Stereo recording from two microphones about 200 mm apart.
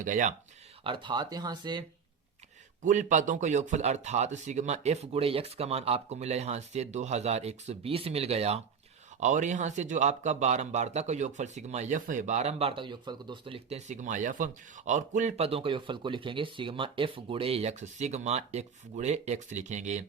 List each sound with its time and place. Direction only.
0.0 s speech: 40° right (ahead or behind)
0.9 s speech: 25° right (ahead or behind)
2.8 s speech: 40° right (ahead or behind)